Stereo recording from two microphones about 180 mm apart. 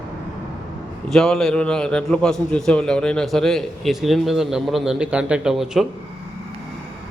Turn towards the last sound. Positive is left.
turn(degrees=0)  # may be behind; listen again after turning